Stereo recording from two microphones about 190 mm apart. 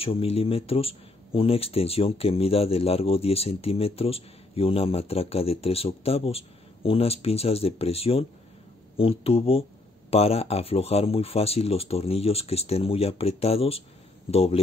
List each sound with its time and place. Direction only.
0.0 s speech: 30° left (ahead or behind)